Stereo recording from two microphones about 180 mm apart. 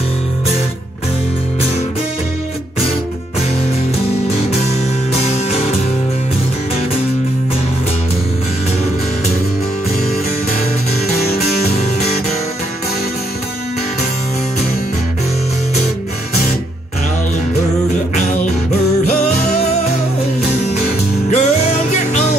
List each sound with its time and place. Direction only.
11.3 s music: 35° left (ahead or behind)
20.4 s music: 40° left (ahead or behind)